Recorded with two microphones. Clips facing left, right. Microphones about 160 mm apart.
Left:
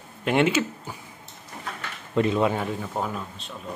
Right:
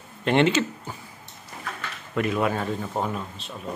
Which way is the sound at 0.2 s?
10° left (ahead or behind).